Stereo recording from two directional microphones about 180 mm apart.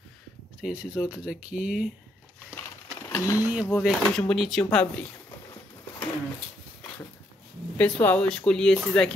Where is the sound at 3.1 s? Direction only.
15° left (ahead or behind).